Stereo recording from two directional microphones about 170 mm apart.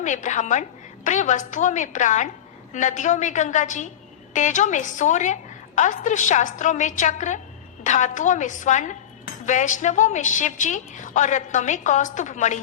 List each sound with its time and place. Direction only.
0.0 s a woman's voice: 45° left (ahead or behind)